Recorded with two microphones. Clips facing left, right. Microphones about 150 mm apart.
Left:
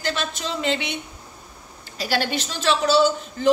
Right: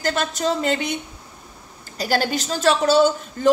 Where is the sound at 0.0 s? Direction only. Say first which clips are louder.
Right 5 dB; 45° right (ahead or behind).